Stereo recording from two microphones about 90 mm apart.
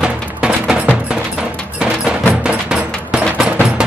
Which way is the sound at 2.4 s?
10° right (ahead or behind).